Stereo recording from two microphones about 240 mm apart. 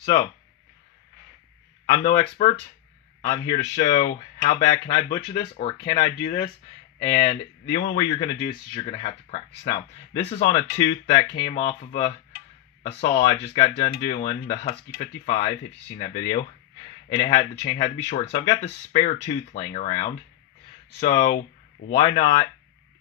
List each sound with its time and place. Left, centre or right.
0.0 s speech: centre
2.0 s speech: left
16.0 s speech: left
17.2 s speech: centre
21.9 s speech: left